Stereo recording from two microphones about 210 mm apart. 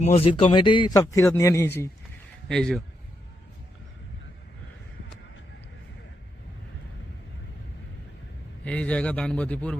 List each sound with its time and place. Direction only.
0.0 s a man's voice: 30° left (ahead or behind); by 2.8 s 5° left (ahead or behind)
8.6 s a man's voice: 5° left (ahead or behind)